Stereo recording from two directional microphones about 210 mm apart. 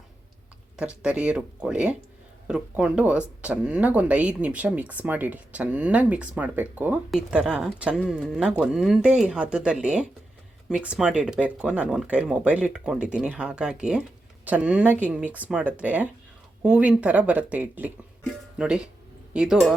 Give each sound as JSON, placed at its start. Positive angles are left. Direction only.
{"t": 1.0, "sound": "speech", "side_deg": -5}